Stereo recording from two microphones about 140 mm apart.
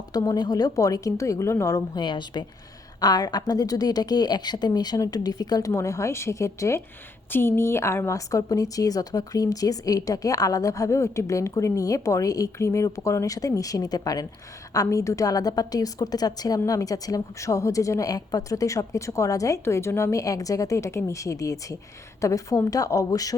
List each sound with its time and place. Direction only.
0.1 s a woman's voice: 25° left (ahead or behind)